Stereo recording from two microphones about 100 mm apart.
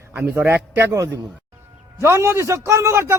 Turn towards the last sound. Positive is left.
turn(degrees=-25)  # may be behind; listen again after turning